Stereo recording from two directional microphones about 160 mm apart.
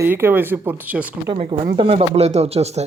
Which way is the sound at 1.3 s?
30° right (ahead or behind).